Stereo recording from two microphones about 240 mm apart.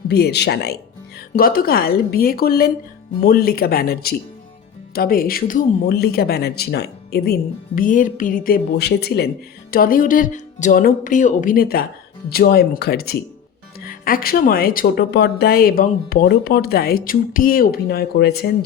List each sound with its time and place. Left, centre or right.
0.1 s speech: left